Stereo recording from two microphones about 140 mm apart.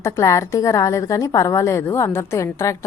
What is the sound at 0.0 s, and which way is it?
A woman's voice, 20° left (ahead or behind).